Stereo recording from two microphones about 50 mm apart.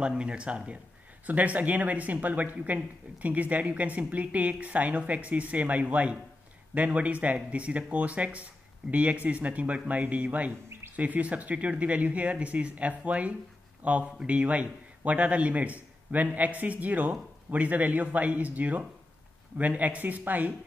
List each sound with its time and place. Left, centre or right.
0.0 s a woman's voice: centre